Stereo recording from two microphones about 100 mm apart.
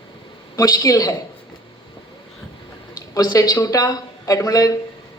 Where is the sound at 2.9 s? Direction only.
40° left (ahead or behind).